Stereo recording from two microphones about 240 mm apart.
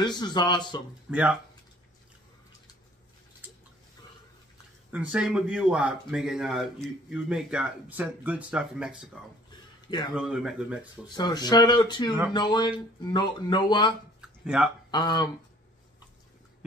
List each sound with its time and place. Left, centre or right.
0.0 s speech: centre
1.1 s speech: centre
4.9 s speech: centre
9.8 s speech: centre
10.1 s speech: centre
11.1 s speech: centre
14.4 s speech: centre
14.9 s speech: centre